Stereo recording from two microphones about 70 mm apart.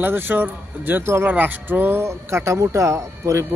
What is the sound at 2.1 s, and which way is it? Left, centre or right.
Speech, right.